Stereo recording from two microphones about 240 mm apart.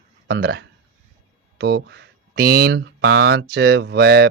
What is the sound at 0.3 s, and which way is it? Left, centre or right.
Speech, right.